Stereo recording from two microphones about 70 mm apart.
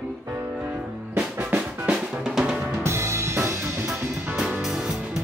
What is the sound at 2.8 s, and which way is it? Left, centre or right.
Music, right.